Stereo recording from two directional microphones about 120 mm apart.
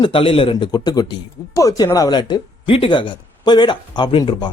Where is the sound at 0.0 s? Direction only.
50° left (ahead or behind).